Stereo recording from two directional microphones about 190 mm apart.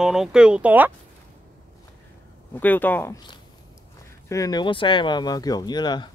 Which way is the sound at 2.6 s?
10° left (ahead or behind).